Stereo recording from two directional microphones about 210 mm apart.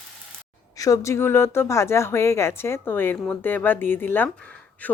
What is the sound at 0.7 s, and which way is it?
Speech, 15° left (ahead or behind).